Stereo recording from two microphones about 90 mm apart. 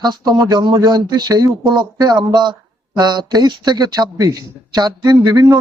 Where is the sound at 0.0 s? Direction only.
50° right (ahead or behind).